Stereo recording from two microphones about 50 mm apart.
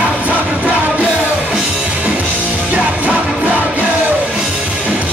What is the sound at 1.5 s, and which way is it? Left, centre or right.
Music, centre.